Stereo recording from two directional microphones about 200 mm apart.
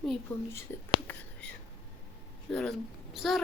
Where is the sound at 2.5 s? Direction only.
5° left (ahead or behind).